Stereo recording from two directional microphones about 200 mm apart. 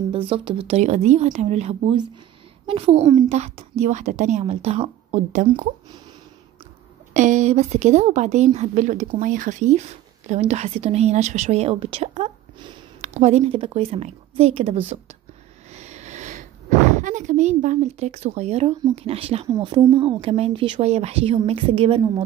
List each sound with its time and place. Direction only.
0.1 s a woman's voice: 25° right (ahead or behind)
5.5 s speech: 25° right (ahead or behind)
7.2 s a woman's voice: 35° right (ahead or behind)
15.7 s a sound: 35° right (ahead or behind)
18.9 s speech: 30° right (ahead or behind)
19.5 s speech: 20° right (ahead or behind)